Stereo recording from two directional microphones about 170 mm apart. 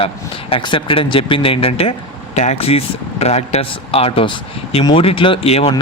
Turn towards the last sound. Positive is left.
turn(degrees=35)  # may be behind; listen again after turning